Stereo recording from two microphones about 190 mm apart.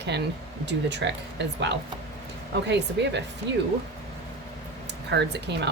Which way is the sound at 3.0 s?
65° right (ahead or behind).